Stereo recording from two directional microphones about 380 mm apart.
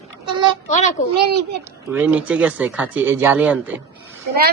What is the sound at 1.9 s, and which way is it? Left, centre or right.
Speech, centre.